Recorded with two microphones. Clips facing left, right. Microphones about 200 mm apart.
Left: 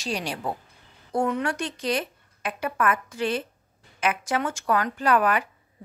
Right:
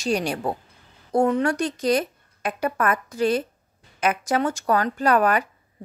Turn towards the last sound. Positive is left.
turn(degrees=-40)  # may be behind; listen again after turning